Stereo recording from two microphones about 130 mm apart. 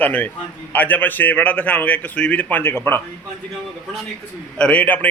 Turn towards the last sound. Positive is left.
turn(degrees=10)  # may be behind; listen again after turning